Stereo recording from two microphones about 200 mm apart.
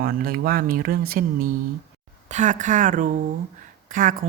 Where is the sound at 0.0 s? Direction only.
45° right (ahead or behind).